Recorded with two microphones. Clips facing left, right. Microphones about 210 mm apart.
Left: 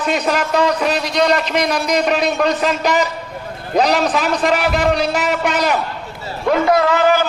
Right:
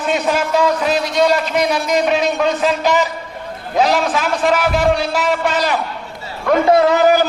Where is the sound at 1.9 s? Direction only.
Centre (ahead or behind).